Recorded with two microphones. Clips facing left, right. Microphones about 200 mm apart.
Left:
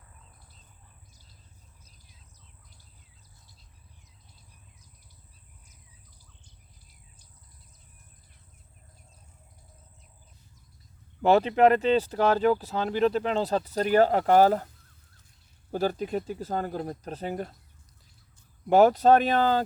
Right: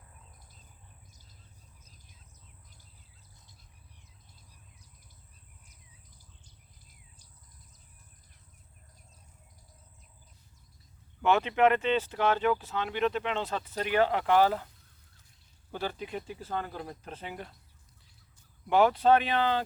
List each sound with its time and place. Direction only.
11.2 s speech: 35° left (ahead or behind)
15.7 s speech: 40° left (ahead or behind)
18.7 s speech: 40° left (ahead or behind)